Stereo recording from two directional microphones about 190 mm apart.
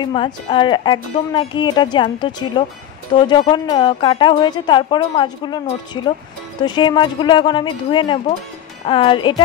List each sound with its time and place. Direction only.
0.0 s a woman's voice: 25° left (ahead or behind)